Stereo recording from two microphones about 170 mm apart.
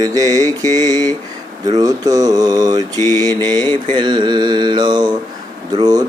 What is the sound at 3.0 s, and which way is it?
Mantra, 15° left (ahead or behind).